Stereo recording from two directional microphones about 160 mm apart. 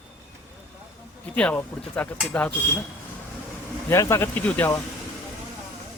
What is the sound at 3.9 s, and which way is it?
Speech, 15° left (ahead or behind).